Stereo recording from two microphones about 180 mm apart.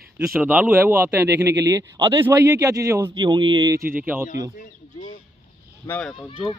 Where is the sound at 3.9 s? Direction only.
10° right (ahead or behind).